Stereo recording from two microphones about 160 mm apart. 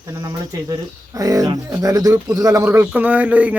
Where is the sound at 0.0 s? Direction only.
25° right (ahead or behind).